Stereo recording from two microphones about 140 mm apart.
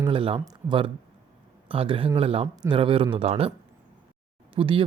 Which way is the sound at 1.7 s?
40° right (ahead or behind).